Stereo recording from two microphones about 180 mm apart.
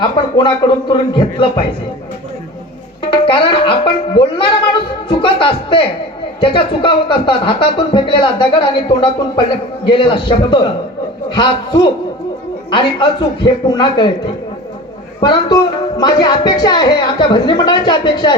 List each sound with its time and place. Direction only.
0.0 s speech: 25° left (ahead or behind)
3.1 s music: 30° left (ahead or behind)
6.4 s speech: 25° left (ahead or behind)
15.2 s speech: 20° left (ahead or behind)